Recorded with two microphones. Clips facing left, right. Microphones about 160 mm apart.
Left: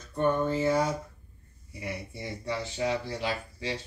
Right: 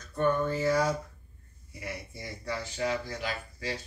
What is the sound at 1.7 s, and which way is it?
Speech, 25° left (ahead or behind).